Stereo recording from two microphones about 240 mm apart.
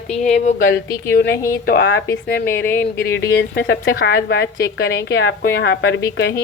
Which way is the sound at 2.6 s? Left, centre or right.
Centre.